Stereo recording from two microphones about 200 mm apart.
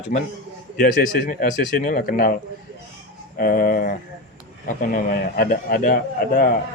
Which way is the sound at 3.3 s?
45° left (ahead or behind).